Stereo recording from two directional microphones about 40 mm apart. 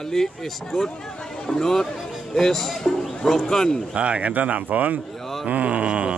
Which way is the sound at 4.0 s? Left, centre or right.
Right.